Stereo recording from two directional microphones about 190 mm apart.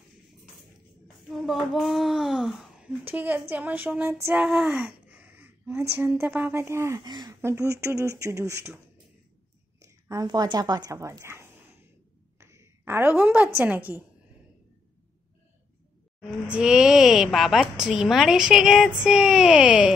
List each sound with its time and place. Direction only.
1.0 s a woman's voice: centre (ahead or behind)
4.3 s a sound: 5° right (ahead or behind)
5.9 s a woman's voice: 10° right (ahead or behind)
9.8 s a woman's voice: 15° right (ahead or behind)
12.4 s a sound: 15° right (ahead or behind)
13.6 s a woman's voice: 10° right (ahead or behind)
16.2 s speech: 5° right (ahead or behind)